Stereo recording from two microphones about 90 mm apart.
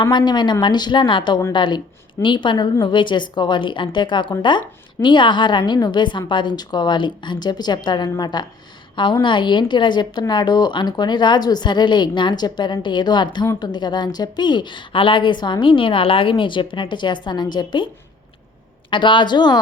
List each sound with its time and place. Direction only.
0.0 s a woman's voice: 60° left (ahead or behind)
9.2 s a woman's voice: 60° left (ahead or behind)
18.9 s a woman's voice: 65° left (ahead or behind)